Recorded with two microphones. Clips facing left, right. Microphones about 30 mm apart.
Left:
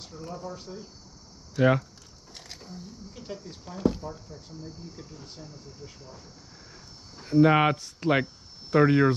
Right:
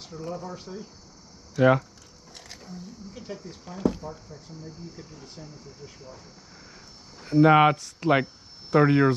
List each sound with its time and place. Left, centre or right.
0.1 s speech: right
1.5 s speech: centre
3.1 s speech: centre
5.4 s speech: right
7.2 s speech: centre